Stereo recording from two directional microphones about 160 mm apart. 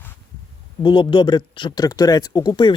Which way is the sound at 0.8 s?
30° left (ahead or behind).